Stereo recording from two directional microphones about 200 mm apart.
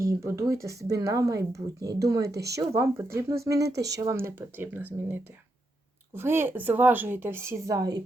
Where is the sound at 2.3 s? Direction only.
55° right (ahead or behind).